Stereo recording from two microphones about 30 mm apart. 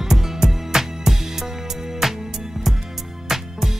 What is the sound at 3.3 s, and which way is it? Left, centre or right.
Music, centre.